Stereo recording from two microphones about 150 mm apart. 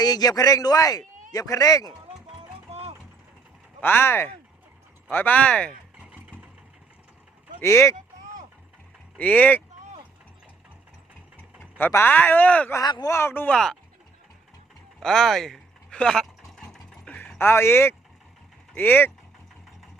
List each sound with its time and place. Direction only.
0.0 s speech: 25° left (ahead or behind)
2.2 s music: 40° right (ahead or behind)
3.8 s speech: 15° left (ahead or behind)
6.0 s vehicle: 10° right (ahead or behind)
7.6 s speech: 20° left (ahead or behind)
9.1 s speech: 10° left (ahead or behind)
11.8 s speech: 15° left (ahead or behind)
12.8 s speech: 25° left (ahead or behind); by 13.7 s 5° left (ahead or behind)
15.0 s a sound: centre (ahead or behind)
18.7 s speech: 15° left (ahead or behind)